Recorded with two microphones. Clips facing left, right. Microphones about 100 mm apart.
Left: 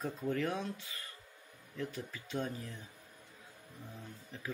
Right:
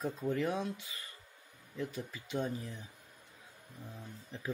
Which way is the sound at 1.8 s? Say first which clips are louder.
Right 1 dB; 15° right (ahead or behind).